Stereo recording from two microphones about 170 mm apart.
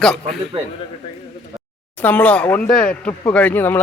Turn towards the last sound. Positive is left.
turn(degrees=10)  # may be behind; listen again after turning